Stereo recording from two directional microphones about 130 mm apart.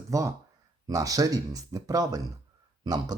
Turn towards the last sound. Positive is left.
turn(degrees=-30)  # may be behind; listen again after turning